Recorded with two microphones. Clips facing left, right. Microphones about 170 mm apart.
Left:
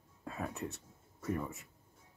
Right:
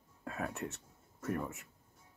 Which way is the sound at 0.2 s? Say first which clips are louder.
Right 1 dB; centre (ahead or behind).